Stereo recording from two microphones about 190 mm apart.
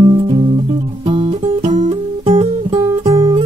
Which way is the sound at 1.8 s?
30° right (ahead or behind).